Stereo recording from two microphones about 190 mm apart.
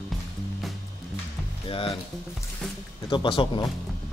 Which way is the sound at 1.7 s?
30° left (ahead or behind).